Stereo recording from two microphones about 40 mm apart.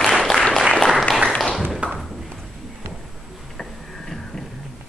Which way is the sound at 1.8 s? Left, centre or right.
Right.